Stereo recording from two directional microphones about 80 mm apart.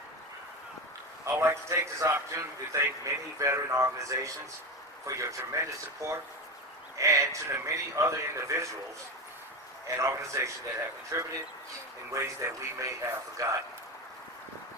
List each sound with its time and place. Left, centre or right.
1.2 s a man's voice: right
9.8 s a man's voice: right